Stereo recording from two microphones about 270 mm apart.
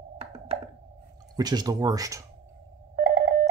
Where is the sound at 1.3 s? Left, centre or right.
Centre.